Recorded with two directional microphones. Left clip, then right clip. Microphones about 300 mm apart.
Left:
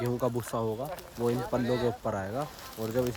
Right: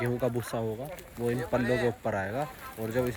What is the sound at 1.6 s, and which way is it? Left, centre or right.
Speech, centre.